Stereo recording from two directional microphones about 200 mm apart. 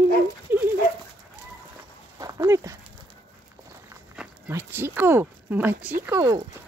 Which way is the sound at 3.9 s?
15° right (ahead or behind).